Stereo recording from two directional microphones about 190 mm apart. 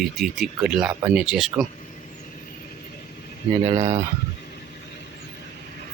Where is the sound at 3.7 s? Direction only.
35° right (ahead or behind).